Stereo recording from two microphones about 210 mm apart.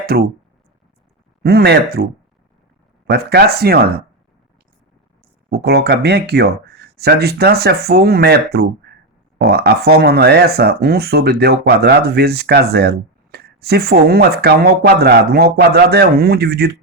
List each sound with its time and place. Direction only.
0.0 s speech: 45° right (ahead or behind)
1.5 s speech: 50° right (ahead or behind)
3.1 s speech: 50° right (ahead or behind)
5.5 s speech: 50° right (ahead or behind)